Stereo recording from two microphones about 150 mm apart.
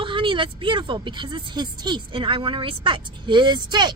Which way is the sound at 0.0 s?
35° right (ahead or behind).